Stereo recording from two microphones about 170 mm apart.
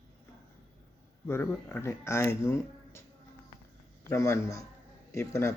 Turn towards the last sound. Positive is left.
turn(degrees=15)  # may be behind; listen again after turning